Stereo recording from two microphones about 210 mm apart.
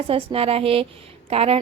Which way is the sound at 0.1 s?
30° right (ahead or behind).